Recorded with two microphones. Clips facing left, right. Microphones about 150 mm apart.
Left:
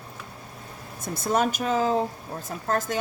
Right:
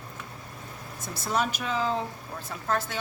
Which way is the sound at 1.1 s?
50° left (ahead or behind).